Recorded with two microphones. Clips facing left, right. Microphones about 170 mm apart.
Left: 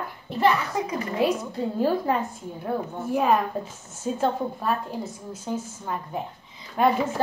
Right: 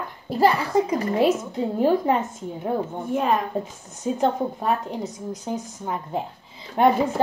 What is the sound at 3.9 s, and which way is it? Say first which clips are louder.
A woman's voice: right 2 dB; 20° right (ahead or behind).